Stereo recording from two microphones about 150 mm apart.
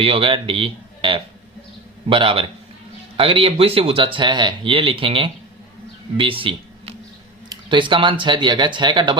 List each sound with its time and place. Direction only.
0.0 s speech: 40° right (ahead or behind)